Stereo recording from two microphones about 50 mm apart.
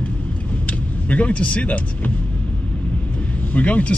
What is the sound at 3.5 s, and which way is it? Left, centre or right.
Speech, left.